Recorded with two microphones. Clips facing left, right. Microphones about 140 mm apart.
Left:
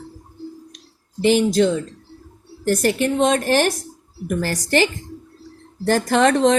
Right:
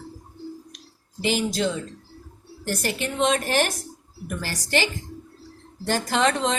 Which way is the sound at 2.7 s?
45° left (ahead or behind).